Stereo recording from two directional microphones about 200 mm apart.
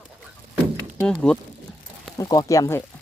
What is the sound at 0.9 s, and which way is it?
Speech, 5° left (ahead or behind).